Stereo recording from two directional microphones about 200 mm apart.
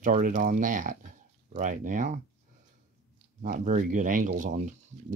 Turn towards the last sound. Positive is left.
turn(degrees=-40)  # may be behind; listen again after turning